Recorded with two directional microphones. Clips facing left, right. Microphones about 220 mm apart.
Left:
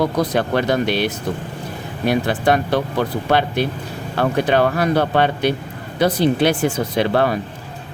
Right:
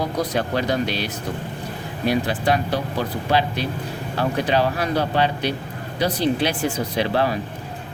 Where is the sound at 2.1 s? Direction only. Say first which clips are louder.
Left 3 dB; 55° left (ahead or behind).